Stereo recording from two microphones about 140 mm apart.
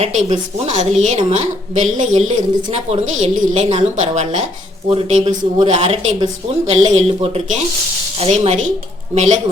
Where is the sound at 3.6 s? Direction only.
40° right (ahead or behind).